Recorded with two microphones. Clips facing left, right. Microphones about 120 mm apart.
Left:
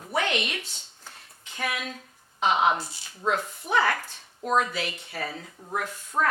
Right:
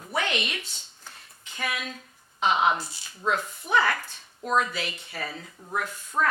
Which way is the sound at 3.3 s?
40° left (ahead or behind).